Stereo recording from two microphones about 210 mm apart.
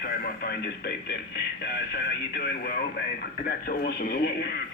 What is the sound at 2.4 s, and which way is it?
Speech, 45° left (ahead or behind).